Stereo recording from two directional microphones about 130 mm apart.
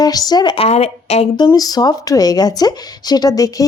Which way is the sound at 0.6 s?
50° left (ahead or behind).